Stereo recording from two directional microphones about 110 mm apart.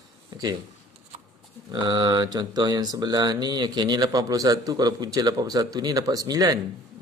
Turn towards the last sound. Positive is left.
turn(degrees=-35)  # may be behind; listen again after turning